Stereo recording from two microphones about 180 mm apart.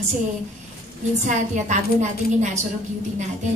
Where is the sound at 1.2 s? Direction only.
40° right (ahead or behind).